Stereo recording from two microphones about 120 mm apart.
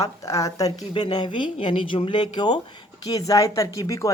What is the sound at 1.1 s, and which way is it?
A woman's voice, 40° left (ahead or behind).